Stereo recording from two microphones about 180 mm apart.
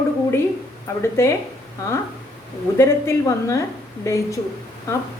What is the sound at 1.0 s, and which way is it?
Speech, 15° left (ahead or behind).